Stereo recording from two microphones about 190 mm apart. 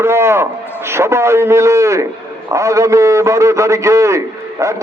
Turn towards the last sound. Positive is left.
turn(degrees=-15)  # may be behind; listen again after turning